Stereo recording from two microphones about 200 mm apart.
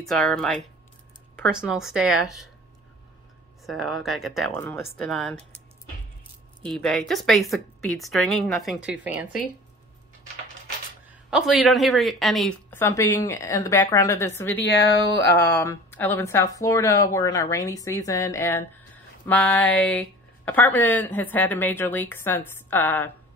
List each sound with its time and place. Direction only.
0.0 s a woman's voice: centre (ahead or behind)
3.6 s a woman's voice: centre (ahead or behind)
4.6 s a woman's voice: 15° left (ahead or behind)
6.6 s a woman's voice: centre (ahead or behind)
11.1 s a woman's voice: 5° right (ahead or behind)
12.7 s speech: 10° left (ahead or behind)